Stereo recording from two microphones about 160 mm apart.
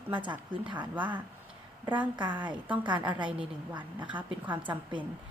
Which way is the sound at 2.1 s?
30° right (ahead or behind).